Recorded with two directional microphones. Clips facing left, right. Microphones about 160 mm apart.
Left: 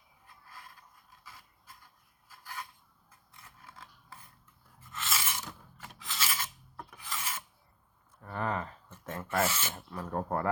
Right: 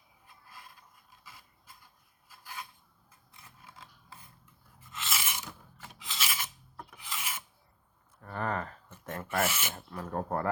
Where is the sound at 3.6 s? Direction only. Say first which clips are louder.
Left 1 dB; 20° right (ahead or behind).